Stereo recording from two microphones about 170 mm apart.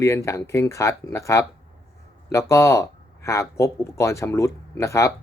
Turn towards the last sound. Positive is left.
turn(degrees=15)  # may be behind; listen again after turning